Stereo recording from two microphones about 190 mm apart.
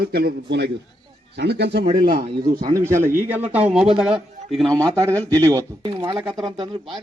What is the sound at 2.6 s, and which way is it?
A man's voice, 15° right (ahead or behind).